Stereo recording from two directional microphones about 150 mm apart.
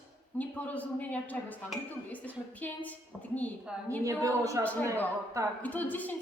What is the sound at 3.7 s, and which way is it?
Speech, 5° right (ahead or behind).